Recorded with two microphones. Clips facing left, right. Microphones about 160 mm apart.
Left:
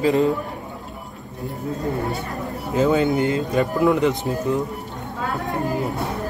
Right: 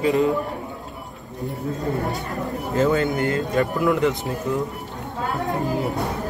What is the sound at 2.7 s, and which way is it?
Speech, 15° left (ahead or behind).